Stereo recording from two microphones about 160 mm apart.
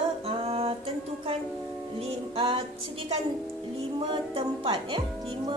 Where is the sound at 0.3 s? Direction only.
35° right (ahead or behind).